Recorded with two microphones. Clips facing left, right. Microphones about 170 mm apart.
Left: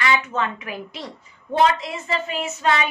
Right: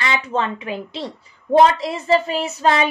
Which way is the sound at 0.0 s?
30° right (ahead or behind).